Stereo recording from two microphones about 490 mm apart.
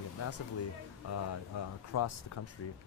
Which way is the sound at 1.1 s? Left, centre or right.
Left.